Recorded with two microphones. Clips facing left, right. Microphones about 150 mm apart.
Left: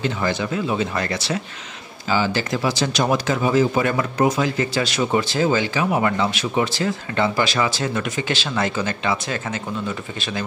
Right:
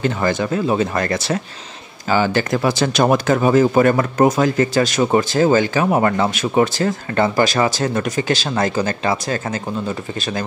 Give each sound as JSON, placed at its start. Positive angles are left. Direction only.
{"t": 0.0, "sound": "speech", "side_deg": -50}